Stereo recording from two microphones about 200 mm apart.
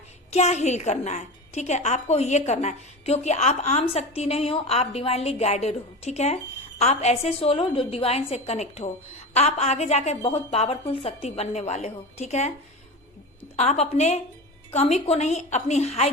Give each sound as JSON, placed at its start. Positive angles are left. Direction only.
{"t": 0.3, "sound": "a woman's voice", "side_deg": 35}
{"t": 13.6, "sound": "a woman's voice", "side_deg": 35}